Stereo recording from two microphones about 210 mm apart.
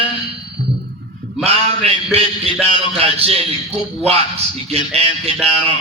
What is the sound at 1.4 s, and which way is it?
A man's voice, 30° right (ahead or behind).